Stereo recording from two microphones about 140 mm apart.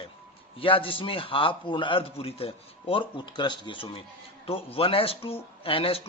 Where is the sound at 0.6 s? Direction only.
40° left (ahead or behind).